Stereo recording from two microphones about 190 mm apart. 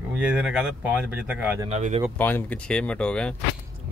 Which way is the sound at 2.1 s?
10° left (ahead or behind).